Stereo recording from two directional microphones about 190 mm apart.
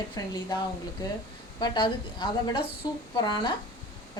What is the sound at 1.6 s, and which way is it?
A woman's voice, 25° left (ahead or behind).